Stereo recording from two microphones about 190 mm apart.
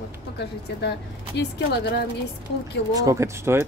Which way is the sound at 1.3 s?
65° left (ahead or behind).